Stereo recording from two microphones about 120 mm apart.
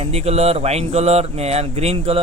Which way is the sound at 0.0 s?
60° right (ahead or behind).